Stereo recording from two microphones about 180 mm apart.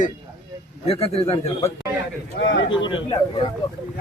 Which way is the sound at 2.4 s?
90° left.